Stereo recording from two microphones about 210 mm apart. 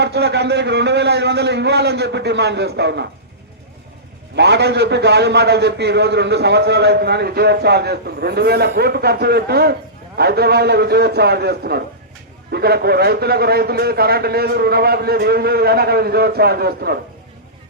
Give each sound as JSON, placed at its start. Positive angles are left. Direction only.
{"t": 0.0, "sound": "a man's voice", "side_deg": -50}
{"t": 4.4, "sound": "a man's voice", "side_deg": -55}